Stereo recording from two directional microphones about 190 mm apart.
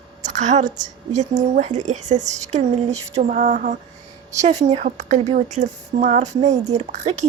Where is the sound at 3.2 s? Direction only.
40° right (ahead or behind).